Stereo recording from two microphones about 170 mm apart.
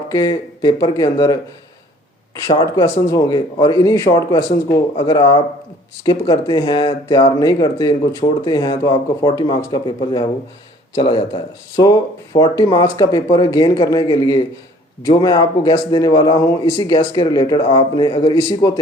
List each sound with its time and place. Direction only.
0.1 s speech: 25° left (ahead or behind)
2.5 s speech: 25° left (ahead or behind)